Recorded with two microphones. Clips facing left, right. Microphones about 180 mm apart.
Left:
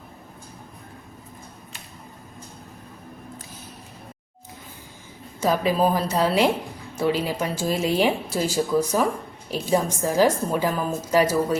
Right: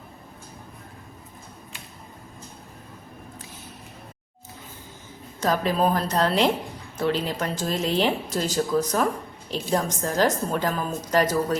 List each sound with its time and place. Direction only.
5.4 s speech: 10° left (ahead or behind)